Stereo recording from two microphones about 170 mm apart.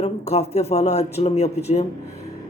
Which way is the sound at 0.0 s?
40° left (ahead or behind).